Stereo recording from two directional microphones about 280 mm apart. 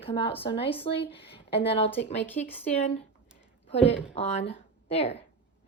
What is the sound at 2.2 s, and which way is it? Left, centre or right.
Speech, centre.